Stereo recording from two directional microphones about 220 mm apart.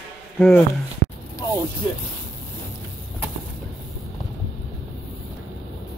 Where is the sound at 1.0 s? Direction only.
45° left (ahead or behind).